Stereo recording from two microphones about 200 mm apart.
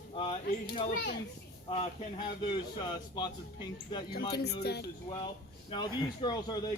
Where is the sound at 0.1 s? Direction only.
25° left (ahead or behind).